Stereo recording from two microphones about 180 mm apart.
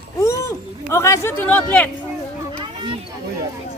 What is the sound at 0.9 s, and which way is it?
Speech, 15° left (ahead or behind).